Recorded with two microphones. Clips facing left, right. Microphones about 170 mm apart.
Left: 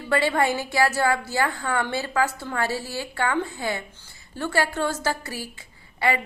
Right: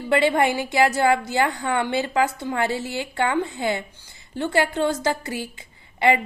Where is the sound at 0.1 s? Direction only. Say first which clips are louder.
Right 3 dB; 20° right (ahead or behind).